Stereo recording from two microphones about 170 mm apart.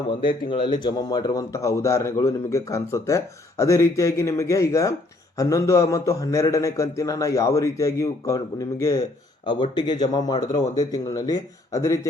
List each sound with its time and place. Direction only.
0.3 s speech: 30° left (ahead or behind)